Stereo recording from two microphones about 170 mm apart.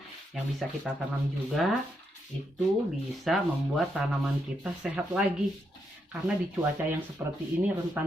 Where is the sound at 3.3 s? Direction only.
Centre (ahead or behind).